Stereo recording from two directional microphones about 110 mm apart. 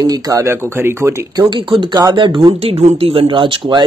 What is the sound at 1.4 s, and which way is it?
Speech, 45° right (ahead or behind).